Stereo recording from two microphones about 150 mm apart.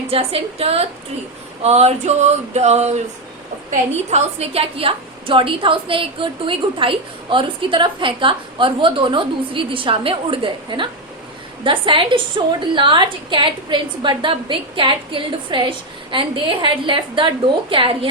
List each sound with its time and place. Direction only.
0.1 s a woman's voice: 40° right (ahead or behind)
1.6 s a sound: 45° right (ahead or behind)
3.7 s a woman's voice: 45° right (ahead or behind)